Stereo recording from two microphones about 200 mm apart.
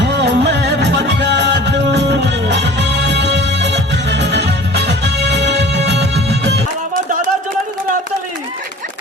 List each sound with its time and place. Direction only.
0.0 s music: 60° right (ahead or behind)